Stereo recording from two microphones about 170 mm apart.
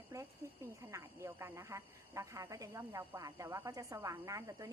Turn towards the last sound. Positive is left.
turn(degrees=-20)  # may be behind; listen again after turning